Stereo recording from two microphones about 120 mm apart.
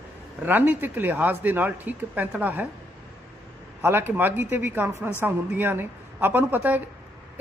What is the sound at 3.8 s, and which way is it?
Speech, 20° right (ahead or behind).